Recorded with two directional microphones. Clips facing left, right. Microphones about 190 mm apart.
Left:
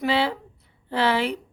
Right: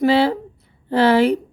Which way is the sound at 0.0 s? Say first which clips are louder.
Right 8 dB; 40° right (ahead or behind).